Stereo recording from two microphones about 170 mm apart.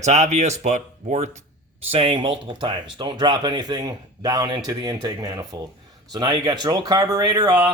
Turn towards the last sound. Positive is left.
turn(degrees=-20)  # may be behind; listen again after turning